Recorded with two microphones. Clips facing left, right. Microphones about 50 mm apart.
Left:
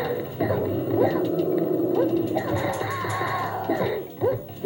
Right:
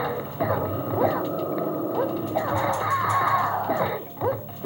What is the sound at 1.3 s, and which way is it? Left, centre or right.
Dog, centre.